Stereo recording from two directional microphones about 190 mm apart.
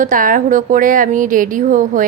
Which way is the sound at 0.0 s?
45° right (ahead or behind).